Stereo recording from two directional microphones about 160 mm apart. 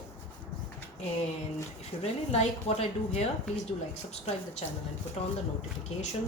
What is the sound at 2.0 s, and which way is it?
A woman's voice, 40° left (ahead or behind).